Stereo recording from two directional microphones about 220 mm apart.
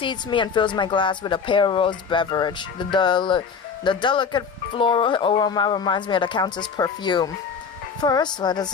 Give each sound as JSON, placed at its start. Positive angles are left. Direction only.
{"t": 0.0, "sound": "speech", "side_deg": 20}